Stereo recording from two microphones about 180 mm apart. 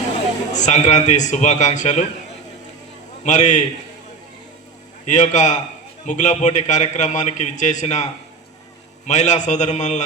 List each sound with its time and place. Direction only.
0.5 s a man's voice: 40° left (ahead or behind)
3.2 s a man's voice: 40° left (ahead or behind)
5.0 s a man's voice: 40° left (ahead or behind)